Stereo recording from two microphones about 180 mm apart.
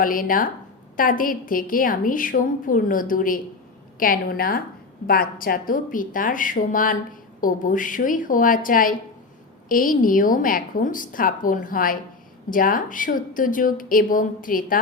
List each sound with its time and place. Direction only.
0.0 s a woman's voice: 50° left (ahead or behind)